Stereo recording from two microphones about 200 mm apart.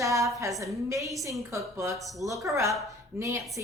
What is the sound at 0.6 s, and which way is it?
A woman's voice, 15° right (ahead or behind).